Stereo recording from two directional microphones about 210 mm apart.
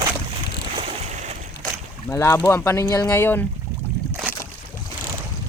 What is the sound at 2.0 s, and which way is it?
Speech, 15° left (ahead or behind).